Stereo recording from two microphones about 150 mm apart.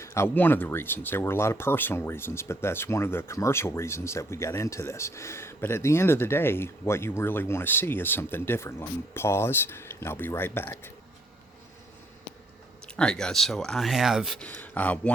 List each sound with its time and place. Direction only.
0.0 s speech: 15° left (ahead or behind)
12.8 s speech: 5° left (ahead or behind)
14.4 s speech: 10° left (ahead or behind)